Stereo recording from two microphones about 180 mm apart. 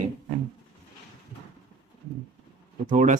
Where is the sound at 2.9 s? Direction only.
45° right (ahead or behind).